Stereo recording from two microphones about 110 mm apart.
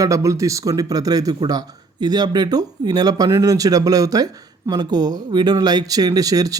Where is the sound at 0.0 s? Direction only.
30° right (ahead or behind).